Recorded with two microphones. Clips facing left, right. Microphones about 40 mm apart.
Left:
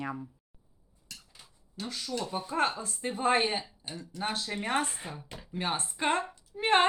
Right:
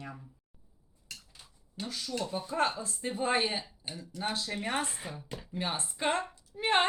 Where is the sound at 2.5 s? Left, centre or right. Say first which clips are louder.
Left 1 dB; centre.